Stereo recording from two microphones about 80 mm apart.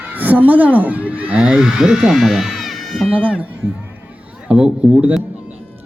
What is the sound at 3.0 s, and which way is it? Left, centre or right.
Speech, centre.